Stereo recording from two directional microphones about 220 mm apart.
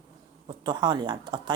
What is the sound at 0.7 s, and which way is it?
Speech, 20° right (ahead or behind).